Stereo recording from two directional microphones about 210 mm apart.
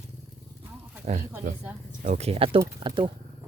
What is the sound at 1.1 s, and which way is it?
Speech, 35° right (ahead or behind).